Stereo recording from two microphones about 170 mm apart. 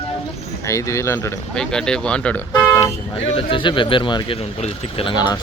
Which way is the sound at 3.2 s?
30° left (ahead or behind).